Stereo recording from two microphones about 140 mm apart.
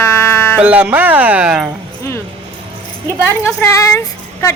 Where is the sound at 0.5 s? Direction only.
10° right (ahead or behind).